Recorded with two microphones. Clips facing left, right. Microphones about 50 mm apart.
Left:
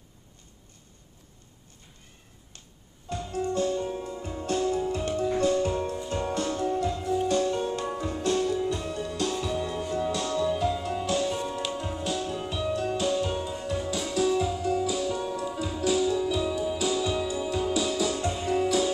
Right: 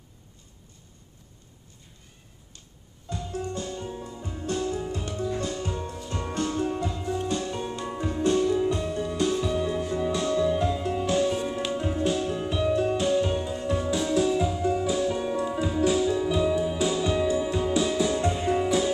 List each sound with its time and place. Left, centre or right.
3.1 s music: left
5.9 s music: left
6.3 s music: right